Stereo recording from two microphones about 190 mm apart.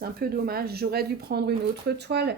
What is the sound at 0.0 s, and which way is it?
Speech, 50° right (ahead or behind).